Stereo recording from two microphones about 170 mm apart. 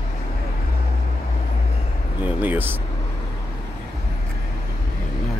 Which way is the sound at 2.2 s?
10° right (ahead or behind).